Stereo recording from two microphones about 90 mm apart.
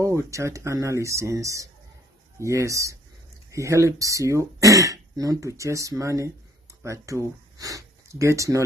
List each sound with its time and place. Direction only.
0.0 s speech: 35° right (ahead or behind)